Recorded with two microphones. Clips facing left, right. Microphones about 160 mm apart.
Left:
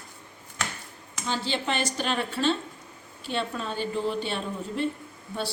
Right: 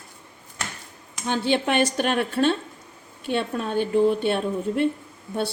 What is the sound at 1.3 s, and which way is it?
A woman's voice, 60° right (ahead or behind).